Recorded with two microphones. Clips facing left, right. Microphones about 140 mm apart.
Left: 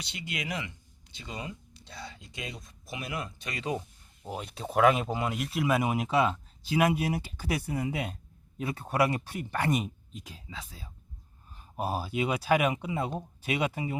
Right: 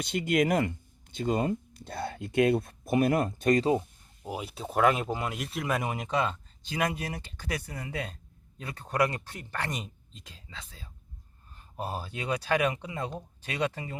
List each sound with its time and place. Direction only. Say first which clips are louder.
0.0 s speech: right 12 dB; 50° right (ahead or behind)
4.2 s speech: right 1 dB; 5° right (ahead or behind); by 14.0 s 10° left (ahead or behind)